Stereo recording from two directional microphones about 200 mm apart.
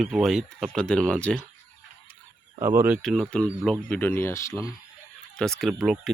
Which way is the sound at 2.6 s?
10° right (ahead or behind).